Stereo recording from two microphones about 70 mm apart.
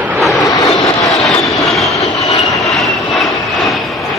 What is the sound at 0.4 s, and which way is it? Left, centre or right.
Vehicle, left.